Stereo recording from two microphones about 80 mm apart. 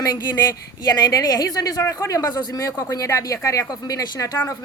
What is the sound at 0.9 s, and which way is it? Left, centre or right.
Speech, left.